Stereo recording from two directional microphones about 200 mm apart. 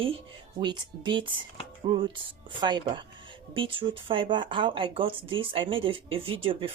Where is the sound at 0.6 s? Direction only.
25° right (ahead or behind).